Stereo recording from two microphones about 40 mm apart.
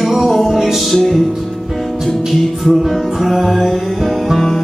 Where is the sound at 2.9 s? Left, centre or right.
Centre.